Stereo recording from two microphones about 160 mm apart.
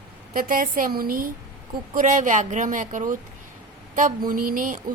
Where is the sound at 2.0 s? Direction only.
55° right (ahead or behind).